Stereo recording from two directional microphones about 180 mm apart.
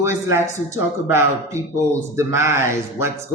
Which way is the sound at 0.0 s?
15° right (ahead or behind).